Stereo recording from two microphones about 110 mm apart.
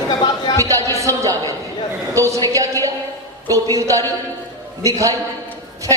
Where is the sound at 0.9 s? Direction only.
30° right (ahead or behind).